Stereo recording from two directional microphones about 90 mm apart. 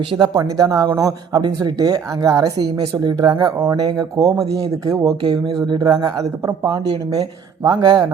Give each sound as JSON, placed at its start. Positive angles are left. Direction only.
{"t": 0.3, "sound": "a woman's voice", "side_deg": -40}